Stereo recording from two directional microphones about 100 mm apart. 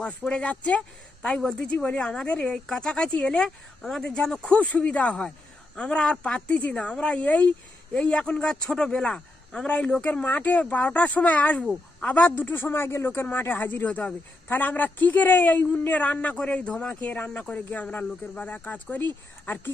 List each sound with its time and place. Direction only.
0.0 s a man's voice: 10° left (ahead or behind)